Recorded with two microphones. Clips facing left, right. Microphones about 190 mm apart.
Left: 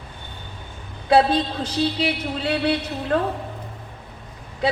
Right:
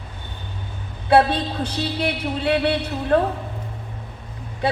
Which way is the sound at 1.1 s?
60° right (ahead or behind).